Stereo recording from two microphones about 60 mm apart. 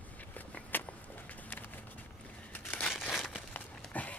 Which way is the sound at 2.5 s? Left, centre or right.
Left.